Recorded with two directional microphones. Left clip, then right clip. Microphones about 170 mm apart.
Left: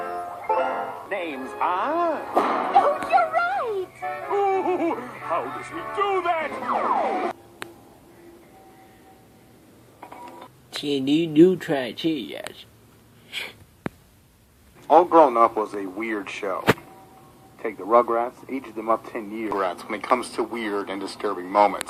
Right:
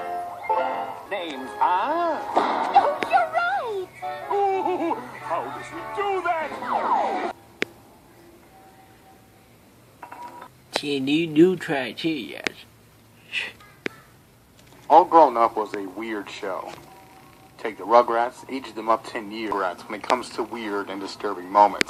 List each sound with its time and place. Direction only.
0.2 s music: 35° left (ahead or behind)
10.7 s speech: 5° left (ahead or behind)
14.8 s speech: 25° left (ahead or behind)
17.6 s speech: 25° left (ahead or behind)
21.5 s speech: 25° left (ahead or behind)